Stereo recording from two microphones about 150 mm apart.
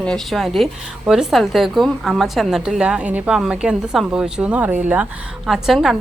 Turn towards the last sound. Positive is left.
turn(degrees=0)  # may be behind; listen again after turning